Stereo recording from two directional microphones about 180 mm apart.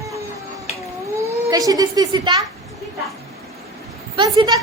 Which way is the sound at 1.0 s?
15° right (ahead or behind).